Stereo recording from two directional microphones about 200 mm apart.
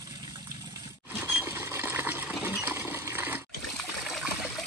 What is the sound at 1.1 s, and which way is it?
Coin, 10° right (ahead or behind).